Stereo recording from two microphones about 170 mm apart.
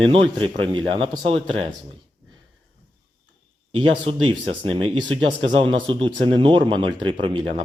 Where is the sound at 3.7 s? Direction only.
30° right (ahead or behind).